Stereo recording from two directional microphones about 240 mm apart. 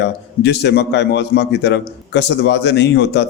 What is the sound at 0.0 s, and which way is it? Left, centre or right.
A man's voice, left.